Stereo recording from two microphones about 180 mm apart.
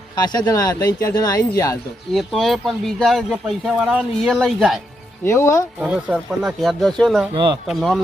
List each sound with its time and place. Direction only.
0.2 s speech: 25° left (ahead or behind)
2.1 s speech: centre (ahead or behind)
5.2 s speech: 15° left (ahead or behind)
5.8 s speech: 5° right (ahead or behind)
7.3 s speech: 25° right (ahead or behind)
7.7 s speech: centre (ahead or behind)